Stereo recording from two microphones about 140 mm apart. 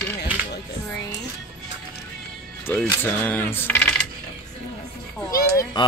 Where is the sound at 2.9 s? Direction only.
15° left (ahead or behind).